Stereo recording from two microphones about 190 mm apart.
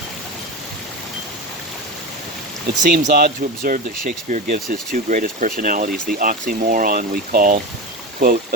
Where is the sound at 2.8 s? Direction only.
45° right (ahead or behind).